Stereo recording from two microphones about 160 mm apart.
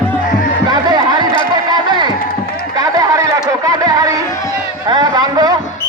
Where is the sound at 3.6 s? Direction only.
25° right (ahead or behind).